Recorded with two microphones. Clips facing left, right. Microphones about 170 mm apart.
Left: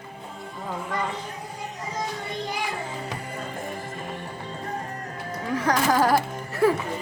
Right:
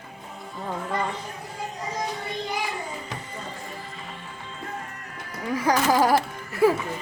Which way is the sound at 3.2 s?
55° left (ahead or behind).